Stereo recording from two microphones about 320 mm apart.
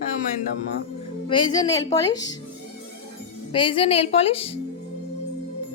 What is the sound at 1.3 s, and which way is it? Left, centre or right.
Speech, centre.